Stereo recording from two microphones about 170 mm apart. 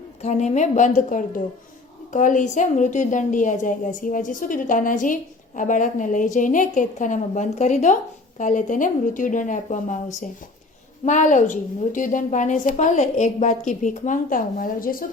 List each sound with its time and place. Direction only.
0.2 s a woman's voice: 45° left (ahead or behind)